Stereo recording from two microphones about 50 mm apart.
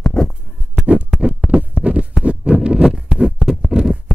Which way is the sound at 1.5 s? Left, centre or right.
Right.